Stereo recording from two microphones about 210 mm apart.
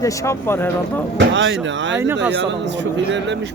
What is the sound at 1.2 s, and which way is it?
Speech, 65° right (ahead or behind).